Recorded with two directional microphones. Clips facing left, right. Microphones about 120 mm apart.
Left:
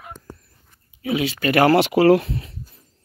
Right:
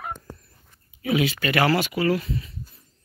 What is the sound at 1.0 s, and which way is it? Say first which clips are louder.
Speech: left 1 dB; 30° left (ahead or behind).